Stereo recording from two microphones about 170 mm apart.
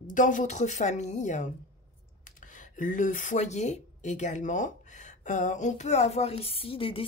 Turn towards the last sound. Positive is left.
turn(degrees=35)  # may be behind; listen again after turning